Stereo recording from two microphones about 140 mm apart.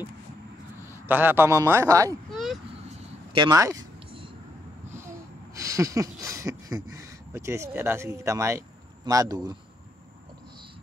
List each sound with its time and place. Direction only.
1.0 s speech: 15° right (ahead or behind)
2.3 s vehicle: centre (ahead or behind)
3.3 s speech: 30° right (ahead or behind)
4.9 s speech: 20° right (ahead or behind)